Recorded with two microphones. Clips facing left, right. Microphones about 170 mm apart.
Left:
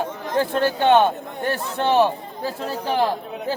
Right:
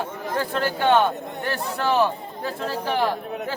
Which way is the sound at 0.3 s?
25° left (ahead or behind).